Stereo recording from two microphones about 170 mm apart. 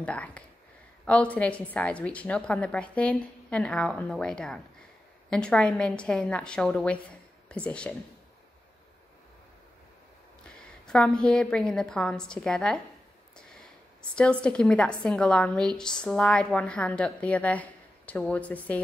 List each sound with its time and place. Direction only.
0.0 s a woman's voice: 5° left (ahead or behind)
10.4 s a woman's voice: 5° left (ahead or behind)
14.1 s a woman's voice: 5° left (ahead or behind)